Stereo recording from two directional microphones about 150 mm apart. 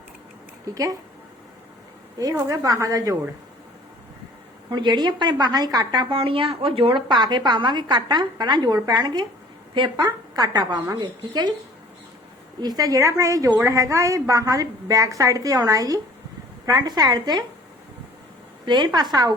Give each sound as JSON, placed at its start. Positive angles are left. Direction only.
{"t": 0.7, "sound": "a woman's voice", "side_deg": -20}
{"t": 2.1, "sound": "a woman's voice", "side_deg": -25}
{"t": 4.7, "sound": "a woman's voice", "side_deg": -30}
{"t": 12.5, "sound": "a woman's voice", "side_deg": -25}
{"t": 18.6, "sound": "a woman's voice", "side_deg": -30}